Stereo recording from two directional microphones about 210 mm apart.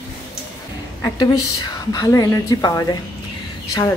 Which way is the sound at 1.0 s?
20° left (ahead or behind).